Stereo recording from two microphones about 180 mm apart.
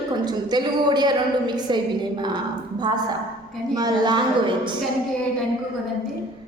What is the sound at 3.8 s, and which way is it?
Speech, 25° right (ahead or behind).